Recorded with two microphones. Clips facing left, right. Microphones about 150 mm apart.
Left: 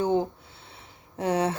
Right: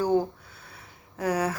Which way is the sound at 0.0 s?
20° left (ahead or behind).